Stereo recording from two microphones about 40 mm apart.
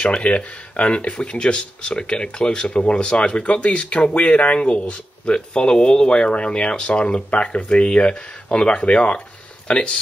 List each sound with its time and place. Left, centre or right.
0.2 s speech: left